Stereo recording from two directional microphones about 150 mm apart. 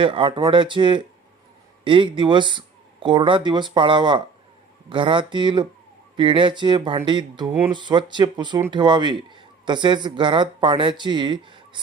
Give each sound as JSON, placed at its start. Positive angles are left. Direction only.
{"t": 0.0, "sound": "speech", "side_deg": -35}